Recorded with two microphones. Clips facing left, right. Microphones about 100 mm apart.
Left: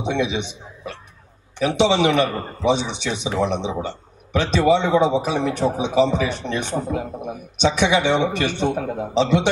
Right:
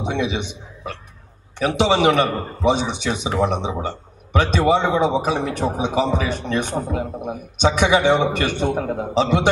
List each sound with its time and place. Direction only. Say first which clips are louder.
0.0 s a man's voice: left 1 dB; 45° right (ahead or behind)